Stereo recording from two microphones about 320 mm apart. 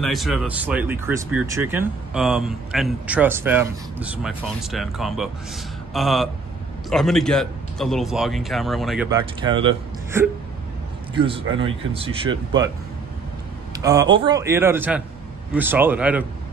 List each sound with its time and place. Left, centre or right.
0.0 s speech: centre
9.2 s speech: centre
13.7 s speech: centre